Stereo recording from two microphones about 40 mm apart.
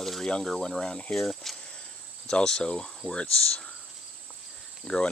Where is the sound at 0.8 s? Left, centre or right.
Centre.